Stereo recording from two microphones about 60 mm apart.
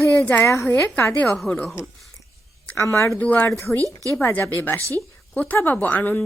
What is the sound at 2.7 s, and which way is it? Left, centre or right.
Speech, left.